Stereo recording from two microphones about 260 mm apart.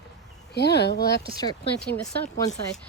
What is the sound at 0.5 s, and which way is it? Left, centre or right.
Speech, left.